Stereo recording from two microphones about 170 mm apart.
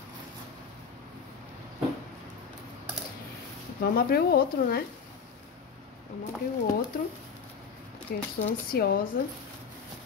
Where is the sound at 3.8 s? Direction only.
60° left (ahead or behind).